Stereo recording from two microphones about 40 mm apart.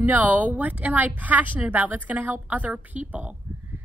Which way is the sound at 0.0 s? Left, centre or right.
Right.